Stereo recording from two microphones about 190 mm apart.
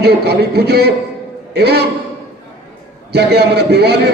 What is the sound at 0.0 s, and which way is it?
A man's voice, 60° right (ahead or behind).